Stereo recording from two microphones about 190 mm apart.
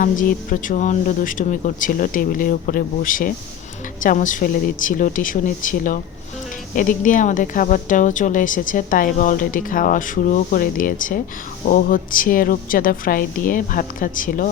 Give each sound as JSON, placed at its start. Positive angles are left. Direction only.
{"t": 0.0, "sound": "a woman's voice", "side_deg": 45}